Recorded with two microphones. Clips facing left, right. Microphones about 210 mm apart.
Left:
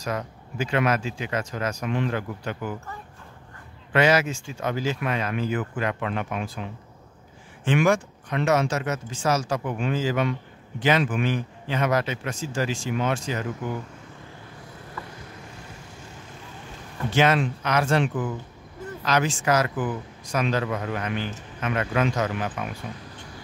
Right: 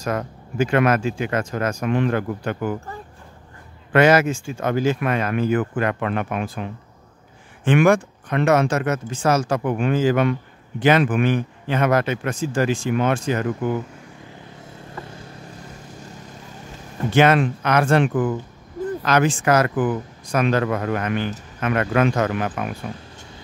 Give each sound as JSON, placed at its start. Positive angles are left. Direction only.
{"t": 0.0, "sound": "speech", "side_deg": -50}
{"t": 3.9, "sound": "a man's voice", "side_deg": -50}
{"t": 17.1, "sound": "a man's voice", "side_deg": -55}